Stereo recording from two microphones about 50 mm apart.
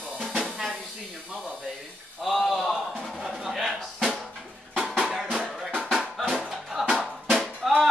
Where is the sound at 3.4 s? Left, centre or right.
Centre.